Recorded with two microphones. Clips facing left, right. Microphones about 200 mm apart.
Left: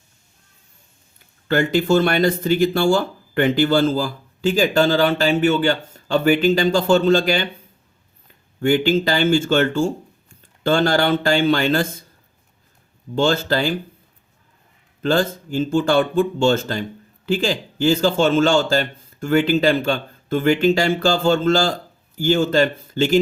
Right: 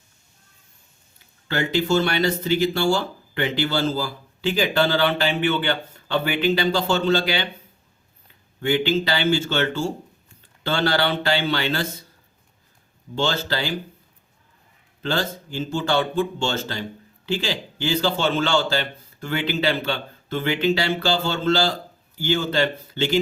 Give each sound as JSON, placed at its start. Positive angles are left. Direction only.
{"t": 1.5, "sound": "speech", "side_deg": 50}
{"t": 8.6, "sound": "speech", "side_deg": 50}
{"t": 13.1, "sound": "speech", "side_deg": 50}
{"t": 15.0, "sound": "speech", "side_deg": 50}